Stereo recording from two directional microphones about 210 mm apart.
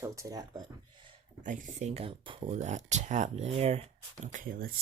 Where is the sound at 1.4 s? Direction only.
35° right (ahead or behind).